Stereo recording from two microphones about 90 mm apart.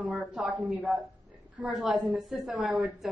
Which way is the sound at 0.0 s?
15° right (ahead or behind).